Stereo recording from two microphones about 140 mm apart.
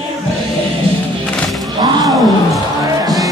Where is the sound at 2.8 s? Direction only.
25° right (ahead or behind).